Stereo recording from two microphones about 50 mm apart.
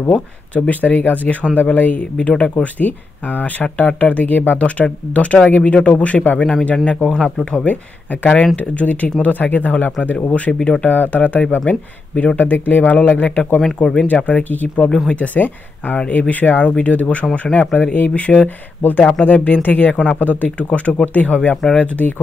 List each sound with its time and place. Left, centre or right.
0.7 s speech: left
7.1 s speech: centre
7.5 s speech: left
10.8 s speech: left
11.6 s speech: left
12.4 s speech: left